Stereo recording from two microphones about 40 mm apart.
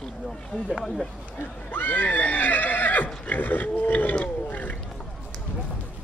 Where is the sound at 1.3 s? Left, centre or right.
Left.